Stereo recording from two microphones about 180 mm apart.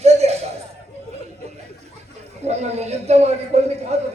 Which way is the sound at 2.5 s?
35° right (ahead or behind).